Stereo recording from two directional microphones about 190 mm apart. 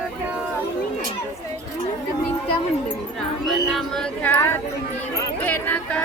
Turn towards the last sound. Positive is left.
turn(degrees=10)  # may be behind; listen again after turning